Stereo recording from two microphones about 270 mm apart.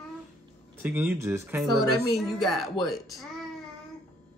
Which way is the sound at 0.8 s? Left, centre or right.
Centre.